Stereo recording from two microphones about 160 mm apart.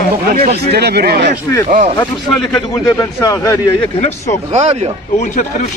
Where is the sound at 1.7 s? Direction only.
50° right (ahead or behind).